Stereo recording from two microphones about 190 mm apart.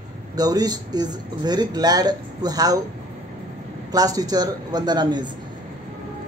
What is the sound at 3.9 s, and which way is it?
Speech, 20° right (ahead or behind).